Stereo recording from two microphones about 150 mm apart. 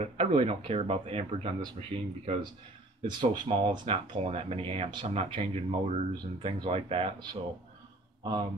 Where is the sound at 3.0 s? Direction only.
30° right (ahead or behind).